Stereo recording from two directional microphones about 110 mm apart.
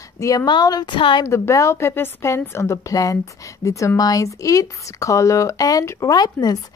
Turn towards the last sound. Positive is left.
turn(degrees=35)  # may be behind; listen again after turning